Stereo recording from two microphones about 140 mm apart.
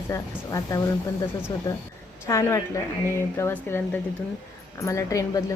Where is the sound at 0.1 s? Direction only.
25° left (ahead or behind).